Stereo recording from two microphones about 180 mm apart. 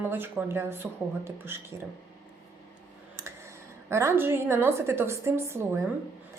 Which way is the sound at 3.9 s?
15° right (ahead or behind).